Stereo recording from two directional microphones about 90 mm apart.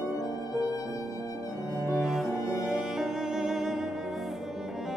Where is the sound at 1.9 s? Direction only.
Centre (ahead or behind).